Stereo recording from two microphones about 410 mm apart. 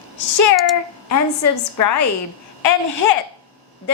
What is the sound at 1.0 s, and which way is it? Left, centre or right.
Speech, left.